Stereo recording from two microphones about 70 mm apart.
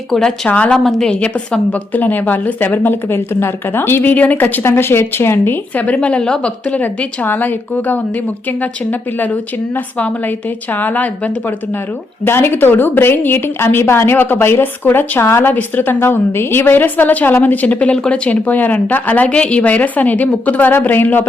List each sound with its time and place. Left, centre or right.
0.1 s a woman's voice: centre
0.4 s a woman's voice: centre
0.9 s a woman's voice: centre; by 5.5 s left
5.7 s a woman's voice: left
12.2 s a woman's voice: left